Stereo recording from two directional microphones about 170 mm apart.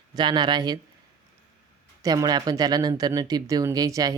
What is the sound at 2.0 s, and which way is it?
Speech, 20° right (ahead or behind).